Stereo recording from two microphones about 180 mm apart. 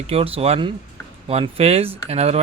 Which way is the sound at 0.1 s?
35° right (ahead or behind).